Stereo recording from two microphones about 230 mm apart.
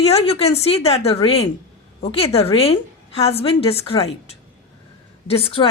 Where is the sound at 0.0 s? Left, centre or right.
Left.